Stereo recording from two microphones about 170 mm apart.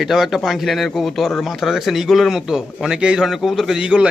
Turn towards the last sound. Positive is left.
turn(degrees=-5)  # may be behind; listen again after turning